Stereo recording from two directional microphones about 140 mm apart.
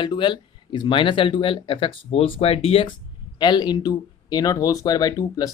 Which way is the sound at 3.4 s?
30° left (ahead or behind).